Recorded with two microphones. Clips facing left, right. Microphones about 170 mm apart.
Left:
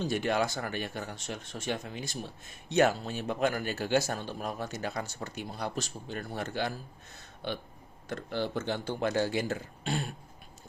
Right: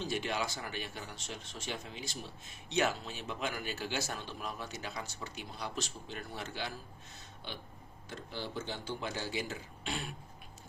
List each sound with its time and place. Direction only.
0.0 s speech: 50° left (ahead or behind)